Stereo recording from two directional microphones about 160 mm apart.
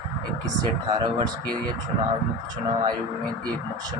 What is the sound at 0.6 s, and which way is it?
Speech, 25° right (ahead or behind).